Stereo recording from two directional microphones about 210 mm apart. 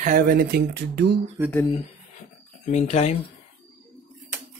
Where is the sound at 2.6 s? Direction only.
35° left (ahead or behind).